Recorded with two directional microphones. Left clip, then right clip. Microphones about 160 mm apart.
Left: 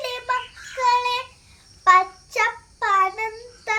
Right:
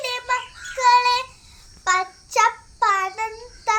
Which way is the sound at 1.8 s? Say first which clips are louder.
Left 6 dB; 20° left (ahead or behind).